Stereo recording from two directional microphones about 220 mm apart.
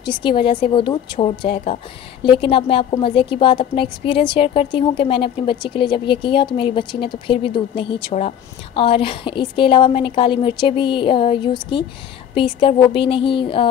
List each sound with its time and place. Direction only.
0.0 s a woman's voice: 20° left (ahead or behind)